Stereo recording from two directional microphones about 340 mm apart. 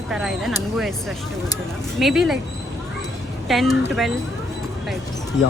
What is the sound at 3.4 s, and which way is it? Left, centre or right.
Speech, centre.